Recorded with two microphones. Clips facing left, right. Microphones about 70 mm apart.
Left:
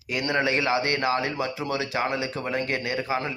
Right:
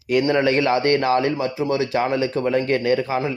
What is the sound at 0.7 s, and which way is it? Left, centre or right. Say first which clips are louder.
Speech: right 6 dB; right.